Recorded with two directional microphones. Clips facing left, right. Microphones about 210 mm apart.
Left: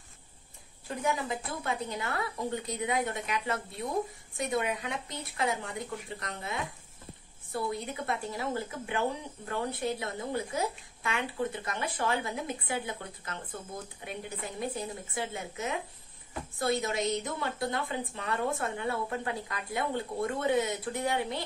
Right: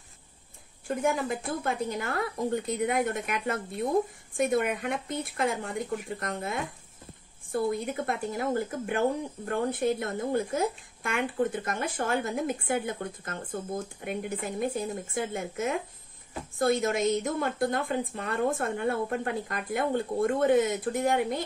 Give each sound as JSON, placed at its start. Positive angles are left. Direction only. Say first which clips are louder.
{"t": 0.8, "sound": "speech", "louder": "right 4 dB", "side_deg": -50}